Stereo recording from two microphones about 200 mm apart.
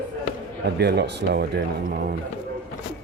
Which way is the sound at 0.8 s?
55° right (ahead or behind).